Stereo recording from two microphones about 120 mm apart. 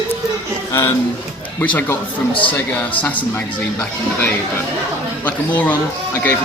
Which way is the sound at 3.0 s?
15° left (ahead or behind).